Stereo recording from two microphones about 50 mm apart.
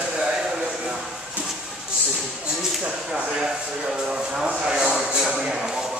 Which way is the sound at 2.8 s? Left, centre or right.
Right.